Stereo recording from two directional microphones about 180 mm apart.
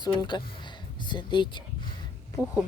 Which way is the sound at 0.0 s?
25° left (ahead or behind).